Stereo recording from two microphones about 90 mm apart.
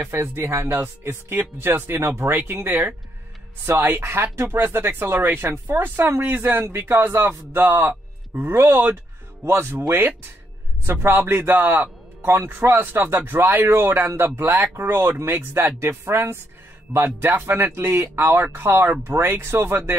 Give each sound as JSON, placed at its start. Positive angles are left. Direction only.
{"t": 0.0, "sound": "speech", "side_deg": -25}